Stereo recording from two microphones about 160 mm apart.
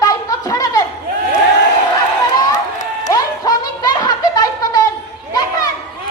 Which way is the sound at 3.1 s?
25° left (ahead or behind).